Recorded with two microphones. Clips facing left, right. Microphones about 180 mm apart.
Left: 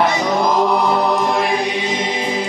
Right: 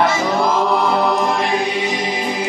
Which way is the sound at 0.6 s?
Centre (ahead or behind).